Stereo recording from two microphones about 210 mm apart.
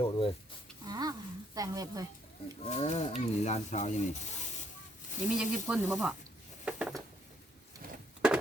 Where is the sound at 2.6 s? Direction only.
30° left (ahead or behind).